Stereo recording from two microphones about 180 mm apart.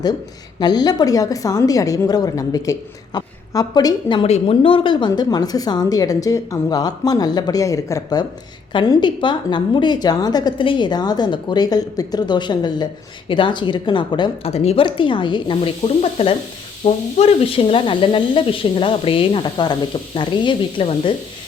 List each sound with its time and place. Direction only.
0.6 s a woman's voice: 20° left (ahead or behind)